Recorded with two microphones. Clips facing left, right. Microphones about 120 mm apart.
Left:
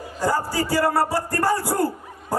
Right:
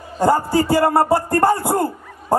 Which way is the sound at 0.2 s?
55° right (ahead or behind).